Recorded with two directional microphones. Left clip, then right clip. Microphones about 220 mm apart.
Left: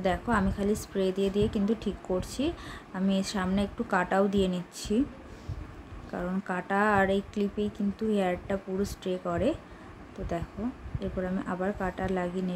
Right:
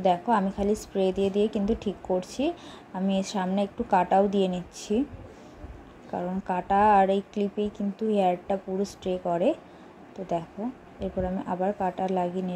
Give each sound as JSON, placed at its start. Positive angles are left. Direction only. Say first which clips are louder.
{"t": 0.0, "sound": "speech", "louder": "right 5 dB", "side_deg": -5}
{"t": 6.1, "sound": "speech", "louder": "right 4 dB", "side_deg": -5}